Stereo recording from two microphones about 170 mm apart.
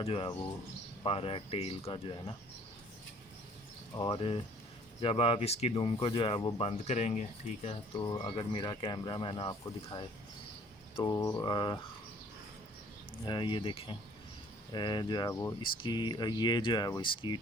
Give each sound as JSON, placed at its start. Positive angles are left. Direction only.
{"t": 0.0, "sound": "speech", "side_deg": 30}
{"t": 3.9, "sound": "speech", "side_deg": 30}
{"t": 7.9, "sound": "speech", "side_deg": 25}
{"t": 11.0, "sound": "speech", "side_deg": 15}
{"t": 13.2, "sound": "speech", "side_deg": 25}